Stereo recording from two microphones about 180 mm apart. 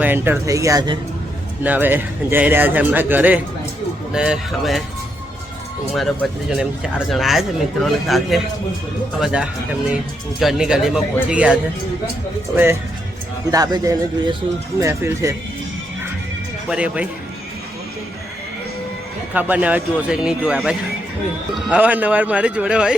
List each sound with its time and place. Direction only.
0.0 s a man's voice: 10° right (ahead or behind)
1.6 s a man's voice: 10° right (ahead or behind)
6.5 s speech: 5° right (ahead or behind)
13.5 s a man's voice: 20° right (ahead or behind)
16.6 s a man's voice: 5° right (ahead or behind)
19.3 s a man's voice: 10° right (ahead or behind)